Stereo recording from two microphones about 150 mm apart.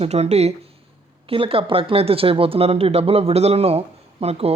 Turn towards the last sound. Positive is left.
turn(degrees=-45)  # may be behind; listen again after turning